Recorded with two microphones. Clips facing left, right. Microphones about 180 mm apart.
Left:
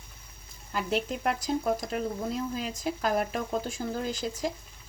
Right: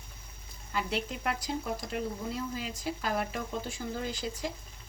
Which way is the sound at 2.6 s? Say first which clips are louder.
Left 4 dB; 45° left (ahead or behind).